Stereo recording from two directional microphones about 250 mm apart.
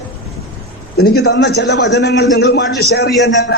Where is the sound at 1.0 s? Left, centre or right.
Left.